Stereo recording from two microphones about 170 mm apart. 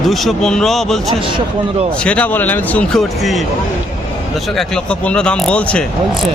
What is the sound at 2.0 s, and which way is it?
A man's voice, 10° left (ahead or behind).